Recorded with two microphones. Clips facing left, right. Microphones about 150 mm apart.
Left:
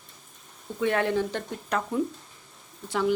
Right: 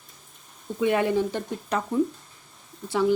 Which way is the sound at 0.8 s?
10° right (ahead or behind).